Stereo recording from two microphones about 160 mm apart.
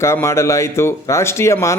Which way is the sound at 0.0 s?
15° left (ahead or behind).